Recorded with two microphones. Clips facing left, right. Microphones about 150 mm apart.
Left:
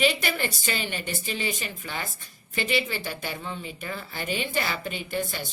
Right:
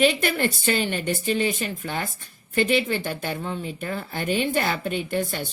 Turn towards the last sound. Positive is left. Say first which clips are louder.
# right 5 dB
turn(degrees=-55)  # may be behind; listen again after turning